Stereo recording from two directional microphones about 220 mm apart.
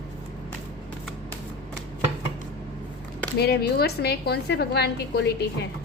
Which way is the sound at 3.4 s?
45° left (ahead or behind).